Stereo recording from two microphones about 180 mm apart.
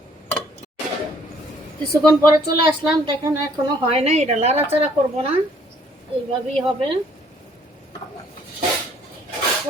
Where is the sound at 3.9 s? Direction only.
35° right (ahead or behind).